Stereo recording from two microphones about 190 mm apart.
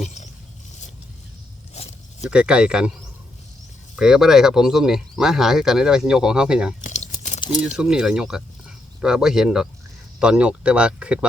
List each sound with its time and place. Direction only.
0.0 s a sound: 35° left (ahead or behind)
1.7 s a sound: 35° left (ahead or behind)
2.3 s speech: 5° right (ahead or behind)
3.9 s speech: 5° right (ahead or behind)
6.8 s crumpling: 40° left (ahead or behind)
7.8 s speech: 5° right (ahead or behind)